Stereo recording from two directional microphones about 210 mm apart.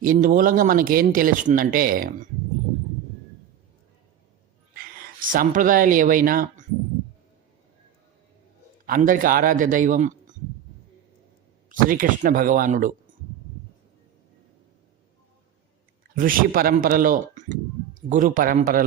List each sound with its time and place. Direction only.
0.0 s speech: 40° right (ahead or behind)
4.8 s speech: 45° right (ahead or behind)
8.9 s speech: 40° right (ahead or behind)
11.7 s speech: 40° right (ahead or behind)
16.1 s speech: 40° right (ahead or behind)